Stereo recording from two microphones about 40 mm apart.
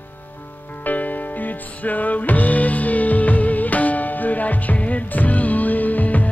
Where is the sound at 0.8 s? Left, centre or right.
Left.